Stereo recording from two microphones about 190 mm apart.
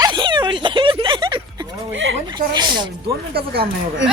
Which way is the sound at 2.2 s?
20° right (ahead or behind).